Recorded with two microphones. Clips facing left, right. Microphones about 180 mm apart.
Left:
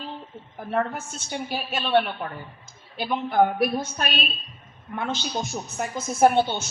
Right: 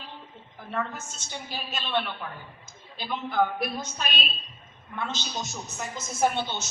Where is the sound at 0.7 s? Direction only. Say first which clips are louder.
Left 6 dB; 55° left (ahead or behind).